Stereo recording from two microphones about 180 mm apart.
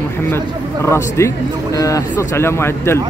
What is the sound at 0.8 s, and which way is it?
Speech, 15° left (ahead or behind).